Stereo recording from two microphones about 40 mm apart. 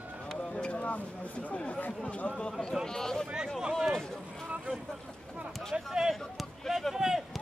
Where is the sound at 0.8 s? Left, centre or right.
Left.